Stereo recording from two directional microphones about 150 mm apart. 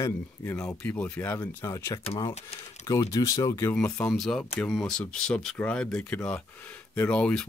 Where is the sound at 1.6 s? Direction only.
20° left (ahead or behind).